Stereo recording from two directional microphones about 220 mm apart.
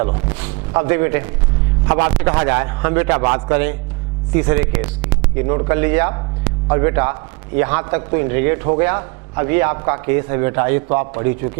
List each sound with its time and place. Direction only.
0.7 s a man's voice: 20° right (ahead or behind)